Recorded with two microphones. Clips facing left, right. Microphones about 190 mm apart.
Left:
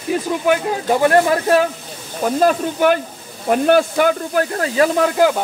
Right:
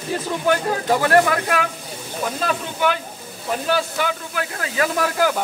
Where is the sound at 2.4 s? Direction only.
45° left (ahead or behind).